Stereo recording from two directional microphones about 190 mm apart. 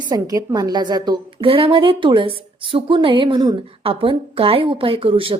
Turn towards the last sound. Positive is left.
turn(degrees=-30)  # may be behind; listen again after turning